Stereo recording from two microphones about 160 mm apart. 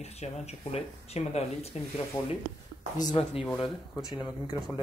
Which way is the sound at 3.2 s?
35° left (ahead or behind).